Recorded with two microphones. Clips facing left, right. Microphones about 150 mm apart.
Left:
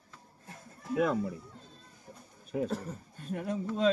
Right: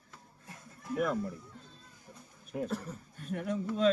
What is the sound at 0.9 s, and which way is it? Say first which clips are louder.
Speech: left 3 dB; 85° left.